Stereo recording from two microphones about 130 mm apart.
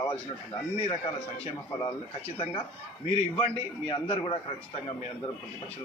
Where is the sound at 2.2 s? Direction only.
45° left (ahead or behind).